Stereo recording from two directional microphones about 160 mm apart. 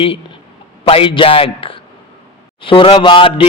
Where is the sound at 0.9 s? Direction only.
35° left (ahead or behind).